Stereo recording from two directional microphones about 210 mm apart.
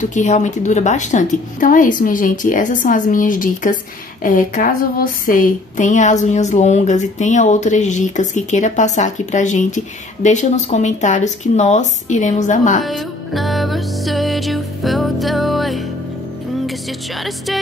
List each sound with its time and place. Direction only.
0.0 s speech: 35° left (ahead or behind)
12.8 s music: centre (ahead or behind)